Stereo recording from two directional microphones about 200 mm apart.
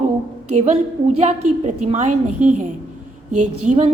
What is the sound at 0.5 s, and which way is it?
A woman's voice, 35° right (ahead or behind).